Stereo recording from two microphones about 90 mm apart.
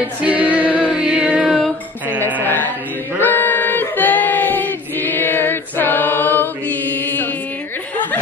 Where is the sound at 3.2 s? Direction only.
20° left (ahead or behind).